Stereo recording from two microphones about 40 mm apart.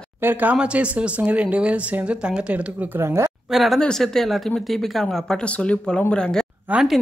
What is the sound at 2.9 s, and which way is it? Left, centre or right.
Speech, right.